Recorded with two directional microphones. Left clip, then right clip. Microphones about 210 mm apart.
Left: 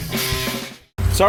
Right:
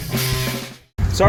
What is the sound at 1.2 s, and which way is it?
Speech, 25° left (ahead or behind).